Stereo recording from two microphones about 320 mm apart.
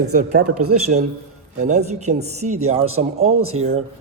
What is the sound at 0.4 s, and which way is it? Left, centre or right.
Speech, right.